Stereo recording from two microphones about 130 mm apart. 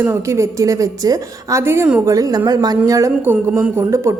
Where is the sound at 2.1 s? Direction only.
25° right (ahead or behind).